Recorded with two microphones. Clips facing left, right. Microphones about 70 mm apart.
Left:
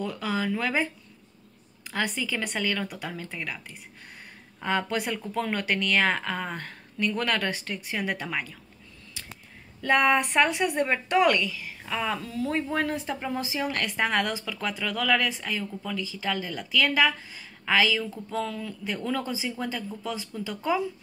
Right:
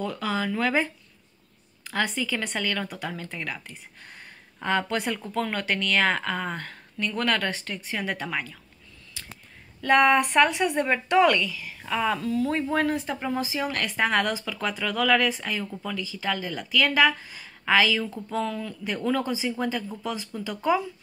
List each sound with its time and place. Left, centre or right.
0.0 s a woman's voice: centre
2.1 s a woman's voice: centre
4.6 s a woman's voice: centre
9.8 s a woman's voice: centre
11.2 s speech: left
11.8 s speech: centre
12.2 s speech: left
12.4 s speech: centre